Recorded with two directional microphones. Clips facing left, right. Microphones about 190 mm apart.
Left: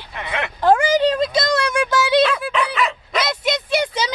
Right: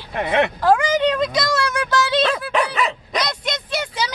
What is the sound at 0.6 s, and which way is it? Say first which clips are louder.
A woman's voice: left 5 dB; 30° left (ahead or behind).